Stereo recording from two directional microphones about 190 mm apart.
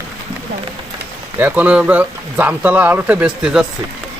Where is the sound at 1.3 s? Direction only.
10° right (ahead or behind).